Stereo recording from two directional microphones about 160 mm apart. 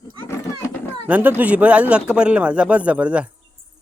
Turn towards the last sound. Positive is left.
turn(degrees=-10)  # may be behind; listen again after turning